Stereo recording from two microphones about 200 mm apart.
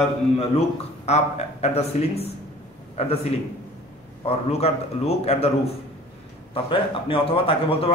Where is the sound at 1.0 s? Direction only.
35° left (ahead or behind).